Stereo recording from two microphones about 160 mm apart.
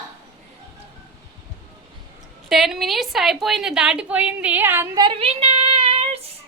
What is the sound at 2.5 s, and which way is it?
A woman's voice, centre (ahead or behind).